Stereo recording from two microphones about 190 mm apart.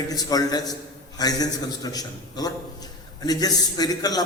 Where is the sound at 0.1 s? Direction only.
20° left (ahead or behind).